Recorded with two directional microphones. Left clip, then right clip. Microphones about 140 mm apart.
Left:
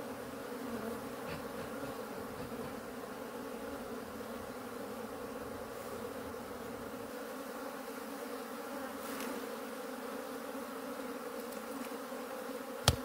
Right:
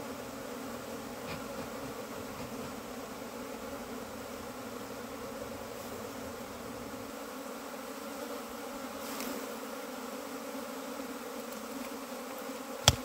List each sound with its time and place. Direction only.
12.9 s bee: 60° right (ahead or behind)